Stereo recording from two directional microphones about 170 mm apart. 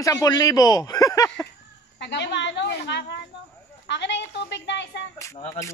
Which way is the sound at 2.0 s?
90° left.